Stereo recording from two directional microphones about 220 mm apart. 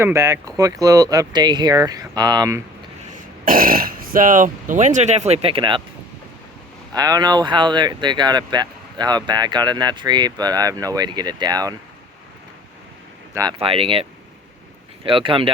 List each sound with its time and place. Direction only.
0.0 s speech: 15° right (ahead or behind)
3.4 s speech: 40° right (ahead or behind); by 5.8 s 20° right (ahead or behind)
6.9 s speech: 15° right (ahead or behind)
13.3 s speech: 15° right (ahead or behind)